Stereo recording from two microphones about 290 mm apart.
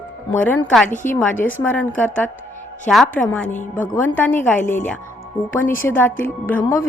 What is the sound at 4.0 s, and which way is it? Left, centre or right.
Speech, centre.